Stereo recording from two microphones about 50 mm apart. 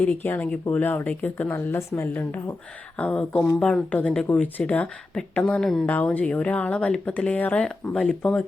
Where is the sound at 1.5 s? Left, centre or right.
Left.